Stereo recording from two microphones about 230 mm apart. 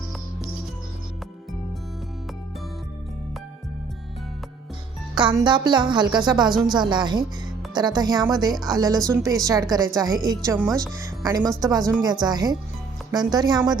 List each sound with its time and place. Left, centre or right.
5.4 s a woman's voice: centre